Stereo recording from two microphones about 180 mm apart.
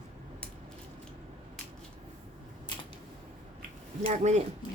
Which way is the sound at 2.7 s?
25° left (ahead or behind).